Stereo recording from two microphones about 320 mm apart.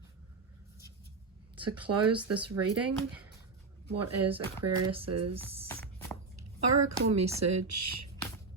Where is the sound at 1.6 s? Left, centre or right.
Right.